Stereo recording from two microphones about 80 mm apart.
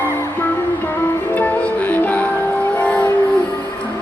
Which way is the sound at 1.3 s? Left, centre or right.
Left.